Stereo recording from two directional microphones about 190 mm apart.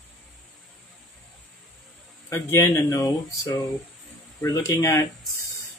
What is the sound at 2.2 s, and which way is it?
Speech, 15° left (ahead or behind).